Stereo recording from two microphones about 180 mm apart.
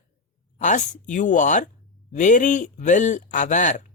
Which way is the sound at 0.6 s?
40° left (ahead or behind).